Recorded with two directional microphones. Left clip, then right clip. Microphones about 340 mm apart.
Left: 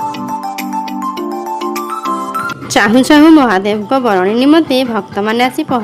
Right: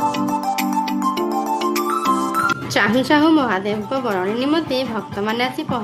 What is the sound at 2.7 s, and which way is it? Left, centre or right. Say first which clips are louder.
A woman's voice: left 9 dB; left.